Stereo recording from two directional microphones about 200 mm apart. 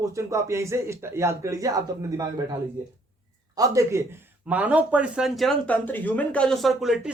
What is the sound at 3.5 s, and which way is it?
Speech, 15° right (ahead or behind).